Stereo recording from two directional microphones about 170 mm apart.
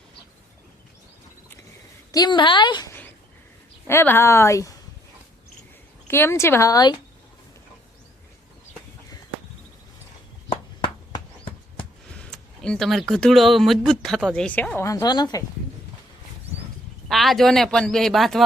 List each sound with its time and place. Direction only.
2.1 s a woman's voice: 25° left (ahead or behind)
3.8 s a woman's voice: 15° left (ahead or behind)
6.1 s a woman's voice: 15° left (ahead or behind)
10.5 s a sound: 25° left (ahead or behind)
12.1 s speech: 5° left (ahead or behind); by 15.4 s 20° left (ahead or behind)
17.1 s speech: centre (ahead or behind)